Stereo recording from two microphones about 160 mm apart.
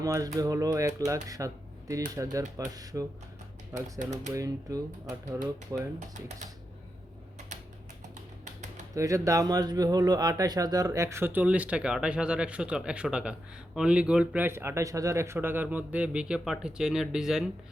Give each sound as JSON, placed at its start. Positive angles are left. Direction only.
{"t": 0.0, "sound": "speech", "side_deg": -20}
{"t": 6.1, "sound": "speech", "side_deg": -50}
{"t": 9.0, "sound": "speech", "side_deg": -20}